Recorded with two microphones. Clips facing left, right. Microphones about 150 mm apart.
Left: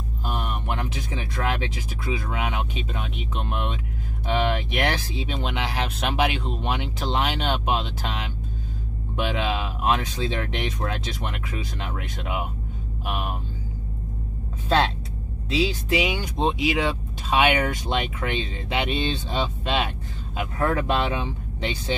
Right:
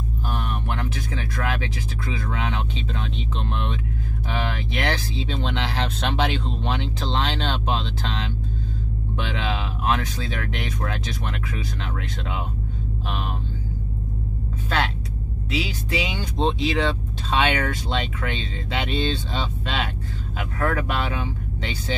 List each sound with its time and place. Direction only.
0.3 s speech: 15° left (ahead or behind)
15.5 s speech: 20° left (ahead or behind)